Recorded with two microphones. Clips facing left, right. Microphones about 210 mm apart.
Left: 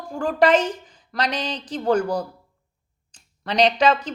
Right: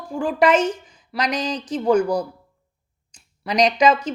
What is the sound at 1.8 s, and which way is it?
Speech, 10° right (ahead or behind).